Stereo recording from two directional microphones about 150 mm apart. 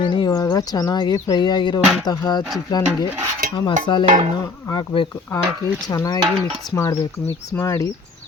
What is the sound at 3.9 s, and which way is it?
Speech, 30° left (ahead or behind).